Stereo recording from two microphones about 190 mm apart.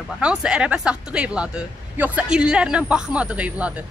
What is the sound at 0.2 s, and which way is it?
Speech, 5° right (ahead or behind).